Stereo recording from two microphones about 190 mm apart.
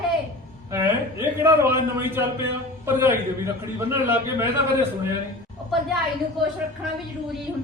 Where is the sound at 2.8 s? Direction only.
15° right (ahead or behind).